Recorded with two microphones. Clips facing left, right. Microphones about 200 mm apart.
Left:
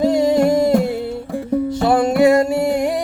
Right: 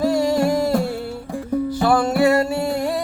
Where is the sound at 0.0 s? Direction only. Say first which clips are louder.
Left 4 dB; 20° left (ahead or behind).